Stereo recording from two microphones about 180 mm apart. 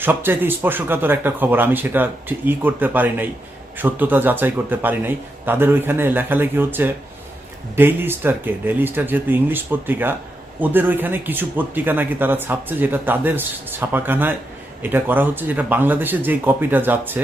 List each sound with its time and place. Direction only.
0.0 s speech: 10° right (ahead or behind)